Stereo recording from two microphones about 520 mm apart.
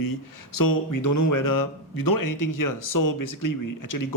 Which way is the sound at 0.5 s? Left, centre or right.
Left.